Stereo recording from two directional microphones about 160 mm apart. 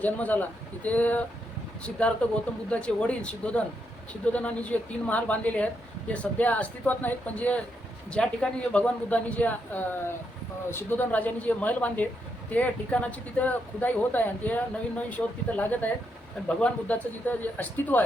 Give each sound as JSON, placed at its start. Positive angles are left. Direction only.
{"t": 0.0, "sound": "speech", "side_deg": 10}